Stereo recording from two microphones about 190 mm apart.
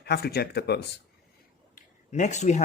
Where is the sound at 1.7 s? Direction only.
40° left (ahead or behind).